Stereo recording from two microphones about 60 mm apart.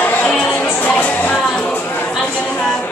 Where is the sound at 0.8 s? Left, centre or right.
Left.